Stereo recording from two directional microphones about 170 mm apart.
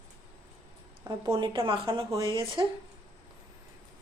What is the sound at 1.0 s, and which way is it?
Speech, 20° right (ahead or behind).